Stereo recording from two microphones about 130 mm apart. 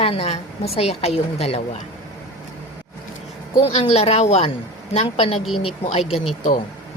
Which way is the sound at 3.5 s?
50° left (ahead or behind).